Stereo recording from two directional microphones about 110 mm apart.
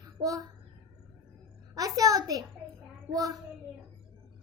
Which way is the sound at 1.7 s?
35° right (ahead or behind).